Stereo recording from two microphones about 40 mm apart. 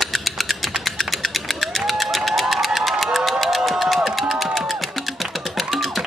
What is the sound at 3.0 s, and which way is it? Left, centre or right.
Music, centre.